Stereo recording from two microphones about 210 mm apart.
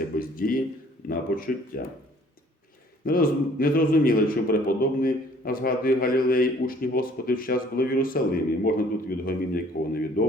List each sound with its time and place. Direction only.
0.2 s a sound: 45° left (ahead or behind)
1.0 s a man's voice: 45° left (ahead or behind)
3.0 s a man's voice: 45° left (ahead or behind)